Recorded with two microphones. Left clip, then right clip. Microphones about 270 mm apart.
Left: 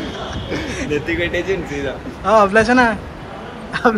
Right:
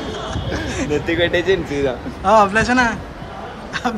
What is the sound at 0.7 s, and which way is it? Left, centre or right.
Speech, centre.